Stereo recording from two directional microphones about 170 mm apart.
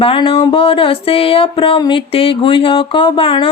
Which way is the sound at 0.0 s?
30° left (ahead or behind).